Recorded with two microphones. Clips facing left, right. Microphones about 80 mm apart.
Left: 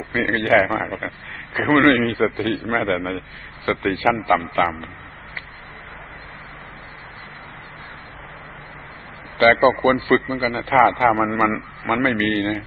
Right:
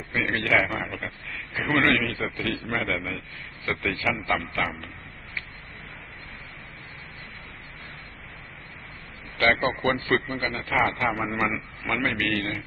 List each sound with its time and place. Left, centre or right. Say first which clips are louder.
0.1 s a man's voice: left 7 dB; left
9.4 s a man's voice: left 9 dB; left